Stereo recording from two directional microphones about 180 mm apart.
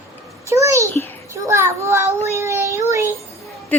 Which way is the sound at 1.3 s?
15° right (ahead or behind).